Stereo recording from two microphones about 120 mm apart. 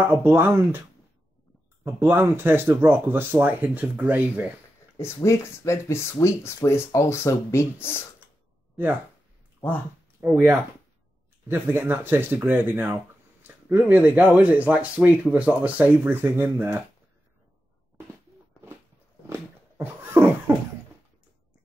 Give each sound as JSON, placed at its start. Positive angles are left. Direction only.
{"t": 0.0, "sound": "speech", "side_deg": -20}
{"t": 2.0, "sound": "speech", "side_deg": -20}
{"t": 4.9, "sound": "speech", "side_deg": 20}
{"t": 10.2, "sound": "speech", "side_deg": -20}
{"t": 19.8, "sound": "a sound", "side_deg": -20}